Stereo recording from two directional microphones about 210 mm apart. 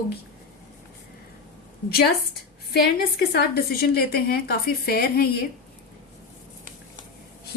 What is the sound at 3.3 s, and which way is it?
A woman's voice, 50° left (ahead or behind).